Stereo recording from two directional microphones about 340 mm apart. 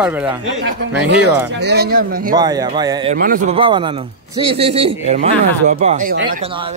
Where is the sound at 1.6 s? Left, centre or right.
Right.